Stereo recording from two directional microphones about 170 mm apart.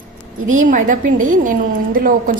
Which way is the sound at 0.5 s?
50° right (ahead or behind).